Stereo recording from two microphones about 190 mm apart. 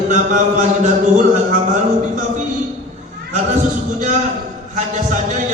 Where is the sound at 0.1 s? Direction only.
40° right (ahead or behind).